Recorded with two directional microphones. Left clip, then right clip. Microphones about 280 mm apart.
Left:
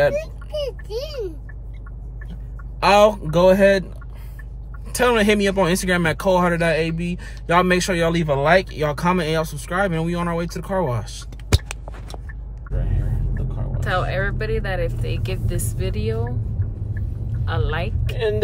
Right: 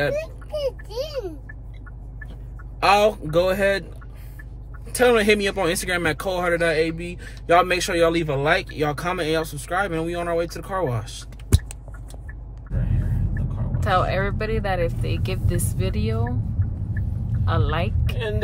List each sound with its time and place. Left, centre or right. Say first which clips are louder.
0.1 s a sound: left 1 dB; right
2.8 s speech: left 3 dB; centre
4.9 s speech: even; centre
13.7 s speech: right 2 dB; centre
17.5 s speech: right 1 dB; centre